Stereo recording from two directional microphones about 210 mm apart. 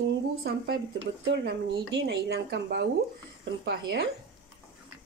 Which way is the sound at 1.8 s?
50° right (ahead or behind).